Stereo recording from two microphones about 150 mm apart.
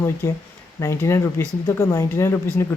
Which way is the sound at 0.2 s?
15° left (ahead or behind).